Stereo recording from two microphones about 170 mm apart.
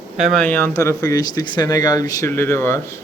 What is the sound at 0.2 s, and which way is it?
Speech, centre (ahead or behind).